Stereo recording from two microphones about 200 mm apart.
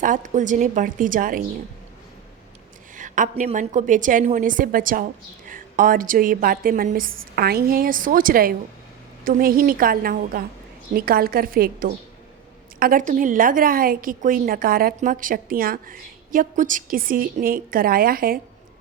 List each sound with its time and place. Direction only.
0.0 s a woman's voice: 40° right (ahead or behind)
2.9 s a woman's voice: 40° right (ahead or behind)